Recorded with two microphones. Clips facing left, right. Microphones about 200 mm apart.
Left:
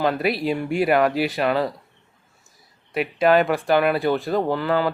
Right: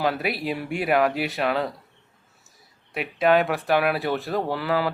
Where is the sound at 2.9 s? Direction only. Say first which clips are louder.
Left 2 dB; centre (ahead or behind).